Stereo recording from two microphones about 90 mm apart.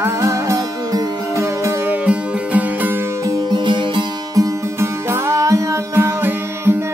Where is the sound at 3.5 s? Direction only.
60° right (ahead or behind).